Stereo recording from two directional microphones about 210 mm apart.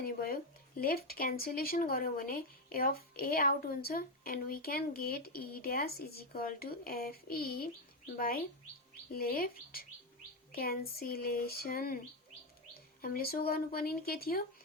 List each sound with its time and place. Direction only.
0.0 s a sound: 45° left (ahead or behind)
0.8 s speech: 45° left (ahead or behind)
13.0 s speech: 45° left (ahead or behind)